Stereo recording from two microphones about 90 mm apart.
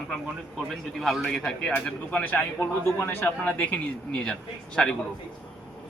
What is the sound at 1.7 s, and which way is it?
Speech, 20° left (ahead or behind).